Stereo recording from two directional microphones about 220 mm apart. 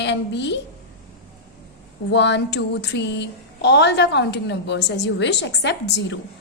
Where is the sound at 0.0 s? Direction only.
50° left (ahead or behind).